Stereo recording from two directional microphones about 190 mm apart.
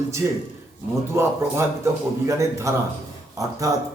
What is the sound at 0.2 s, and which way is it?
A man's voice, 10° right (ahead or behind).